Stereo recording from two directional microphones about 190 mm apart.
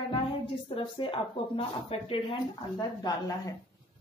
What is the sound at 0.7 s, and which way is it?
Speech, 30° left (ahead or behind).